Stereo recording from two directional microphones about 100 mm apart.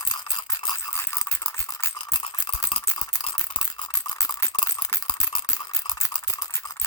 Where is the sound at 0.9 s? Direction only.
30° left (ahead or behind).